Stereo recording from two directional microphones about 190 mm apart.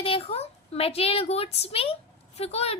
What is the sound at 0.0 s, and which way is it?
A woman's voice, 30° left (ahead or behind).